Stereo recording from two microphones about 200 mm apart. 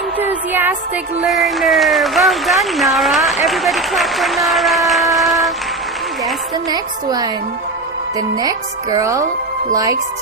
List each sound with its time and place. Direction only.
0.2 s music: 10° right (ahead or behind)
1.2 s speech: centre (ahead or behind)
6.7 s a woman's voice: 20° right (ahead or behind)
8.4 s speech: 20° right (ahead or behind)